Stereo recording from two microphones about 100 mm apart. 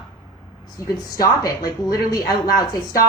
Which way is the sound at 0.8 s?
30° left (ahead or behind).